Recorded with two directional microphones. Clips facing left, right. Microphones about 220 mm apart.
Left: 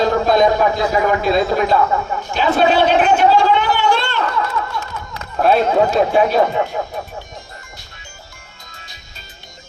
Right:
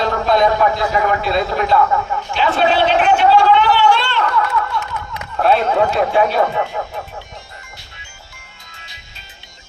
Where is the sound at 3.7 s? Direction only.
45° left (ahead or behind).